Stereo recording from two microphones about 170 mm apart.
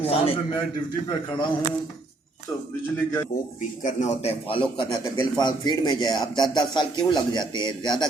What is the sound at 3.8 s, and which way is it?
Speech, 40° left (ahead or behind).